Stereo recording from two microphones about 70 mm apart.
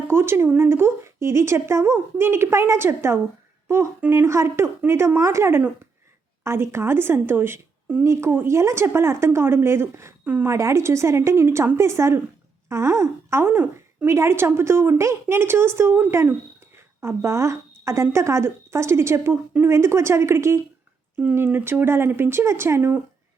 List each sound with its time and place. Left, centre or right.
0.1 s a woman's voice: right
13.4 s a woman's voice: right
17.0 s a woman's voice: right